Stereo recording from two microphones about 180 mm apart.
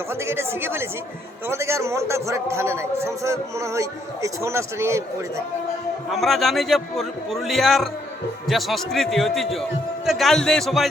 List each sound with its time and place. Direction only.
0.1 s a man's voice: 15° right (ahead or behind)
6.1 s a man's voice: centre (ahead or behind)